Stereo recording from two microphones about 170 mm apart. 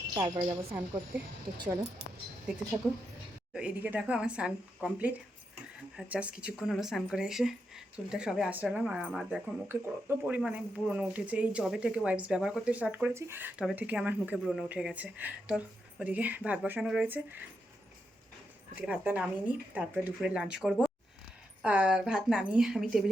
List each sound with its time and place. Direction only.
0.1 s a woman's voice: 25° right (ahead or behind)
1.1 s speech: 10° right (ahead or behind)
2.8 s speech: centre (ahead or behind)
9.6 s speech: 15° right (ahead or behind)
18.8 s speech: 10° right (ahead or behind)